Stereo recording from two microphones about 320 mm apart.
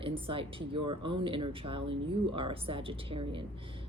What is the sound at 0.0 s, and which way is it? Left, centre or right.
Speech, centre.